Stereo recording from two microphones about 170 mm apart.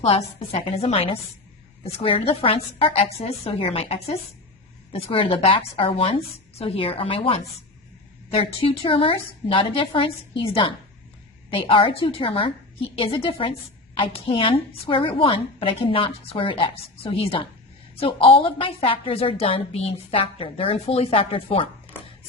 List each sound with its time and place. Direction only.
0.0 s a woman's voice: 35° left (ahead or behind)